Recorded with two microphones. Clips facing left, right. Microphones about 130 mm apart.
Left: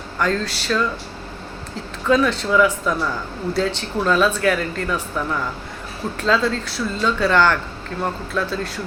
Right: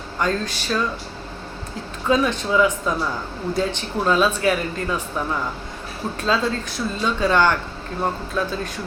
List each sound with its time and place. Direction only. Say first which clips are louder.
0.2 s speech: left 1 dB; 20° right (ahead or behind)
2.0 s speech: left 2 dB; 20° right (ahead or behind)
6.2 s speech: left 2 dB; 20° right (ahead or behind)